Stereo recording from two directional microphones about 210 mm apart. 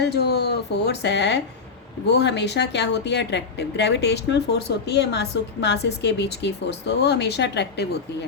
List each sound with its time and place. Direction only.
0.0 s a woman's voice: 50° left (ahead or behind)